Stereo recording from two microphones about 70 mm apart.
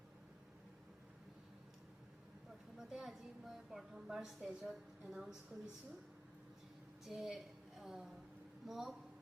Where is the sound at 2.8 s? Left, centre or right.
Centre.